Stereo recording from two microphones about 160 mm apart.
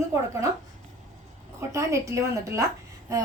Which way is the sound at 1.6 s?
20° right (ahead or behind).